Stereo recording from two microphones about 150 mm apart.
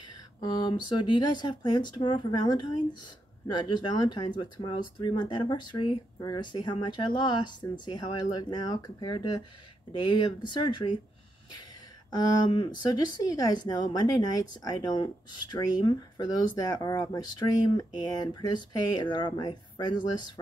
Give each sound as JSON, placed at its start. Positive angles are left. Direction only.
{"t": 0.5, "sound": "speech", "side_deg": 30}
{"t": 12.1, "sound": "speech", "side_deg": 25}